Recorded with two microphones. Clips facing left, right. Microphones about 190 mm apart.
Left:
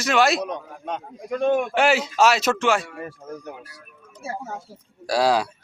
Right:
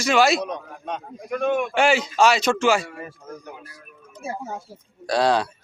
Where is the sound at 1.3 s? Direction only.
30° left (ahead or behind).